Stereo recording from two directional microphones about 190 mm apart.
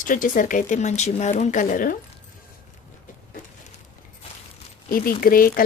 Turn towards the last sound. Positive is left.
turn(degrees=50)  # may be behind; listen again after turning